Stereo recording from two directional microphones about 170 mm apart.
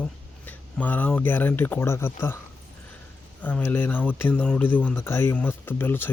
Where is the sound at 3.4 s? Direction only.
10° left (ahead or behind).